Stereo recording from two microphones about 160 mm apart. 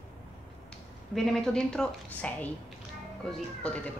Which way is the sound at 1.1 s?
5° left (ahead or behind).